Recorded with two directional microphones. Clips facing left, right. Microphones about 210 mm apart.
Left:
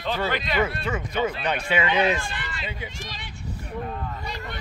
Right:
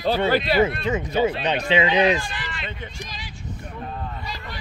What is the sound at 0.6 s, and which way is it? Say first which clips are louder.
Speech: right 5 dB; 20° right (ahead or behind).